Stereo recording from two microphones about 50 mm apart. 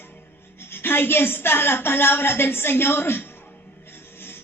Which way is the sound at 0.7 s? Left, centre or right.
Left.